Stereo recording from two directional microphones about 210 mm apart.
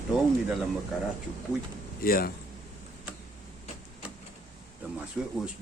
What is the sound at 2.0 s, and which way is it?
Speech, 45° left (ahead or behind).